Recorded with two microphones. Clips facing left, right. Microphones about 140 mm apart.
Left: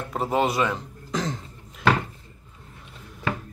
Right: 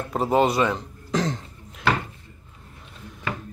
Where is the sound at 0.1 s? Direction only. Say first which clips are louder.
Right 3 dB; centre (ahead or behind).